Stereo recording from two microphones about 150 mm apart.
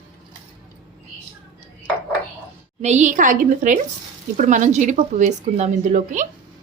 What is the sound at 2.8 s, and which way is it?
A woman's voice, 50° right (ahead or behind).